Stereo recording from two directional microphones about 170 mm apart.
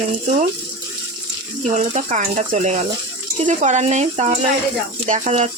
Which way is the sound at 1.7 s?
45° right (ahead or behind).